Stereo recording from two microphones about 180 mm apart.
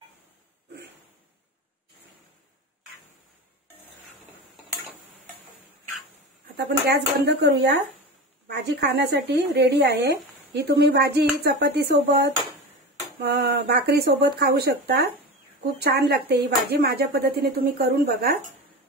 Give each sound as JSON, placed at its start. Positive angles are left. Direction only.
{"t": 6.5, "sound": "a woman's voice", "side_deg": -65}